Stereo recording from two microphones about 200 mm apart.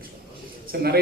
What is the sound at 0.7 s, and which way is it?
Speech, 50° right (ahead or behind).